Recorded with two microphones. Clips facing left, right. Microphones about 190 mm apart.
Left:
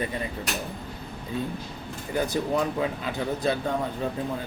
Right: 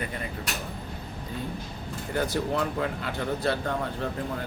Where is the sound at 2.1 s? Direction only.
15° left (ahead or behind).